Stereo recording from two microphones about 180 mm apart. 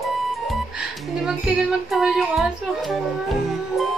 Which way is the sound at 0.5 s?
5° right (ahead or behind).